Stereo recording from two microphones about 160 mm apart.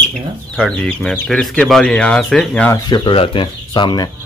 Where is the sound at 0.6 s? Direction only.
Centre (ahead or behind).